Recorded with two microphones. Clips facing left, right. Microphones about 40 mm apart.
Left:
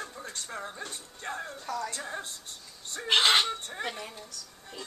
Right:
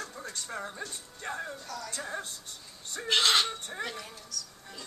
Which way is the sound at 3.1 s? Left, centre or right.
Left.